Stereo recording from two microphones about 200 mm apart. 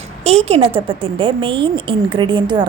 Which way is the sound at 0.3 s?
30° right (ahead or behind).